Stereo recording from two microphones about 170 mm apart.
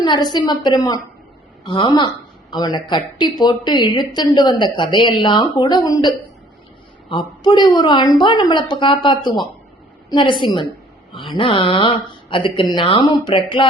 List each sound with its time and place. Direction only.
0.0 s a woman's voice: 25° left (ahead or behind)
7.1 s speech: 25° left (ahead or behind)